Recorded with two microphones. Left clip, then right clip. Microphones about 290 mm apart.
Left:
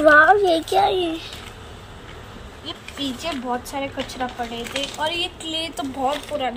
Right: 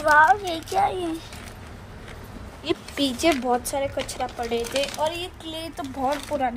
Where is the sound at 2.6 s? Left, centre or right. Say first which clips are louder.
Right 4 dB; right.